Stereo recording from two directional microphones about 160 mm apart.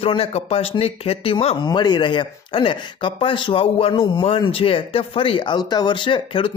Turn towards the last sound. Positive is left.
turn(degrees=30)  # may be behind; listen again after turning